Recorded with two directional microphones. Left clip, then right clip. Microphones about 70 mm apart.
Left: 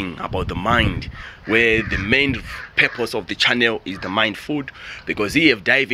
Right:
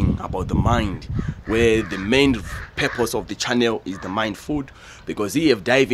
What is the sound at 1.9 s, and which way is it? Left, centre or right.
Speech, right.